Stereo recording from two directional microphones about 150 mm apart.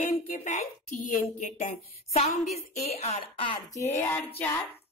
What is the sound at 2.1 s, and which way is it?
Speech, 45° left (ahead or behind).